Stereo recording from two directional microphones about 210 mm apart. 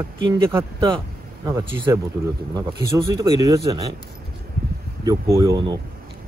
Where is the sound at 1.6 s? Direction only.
20° right (ahead or behind).